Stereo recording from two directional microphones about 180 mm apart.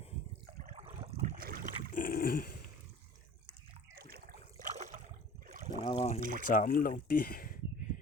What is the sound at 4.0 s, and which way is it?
Water, 55° right (ahead or behind).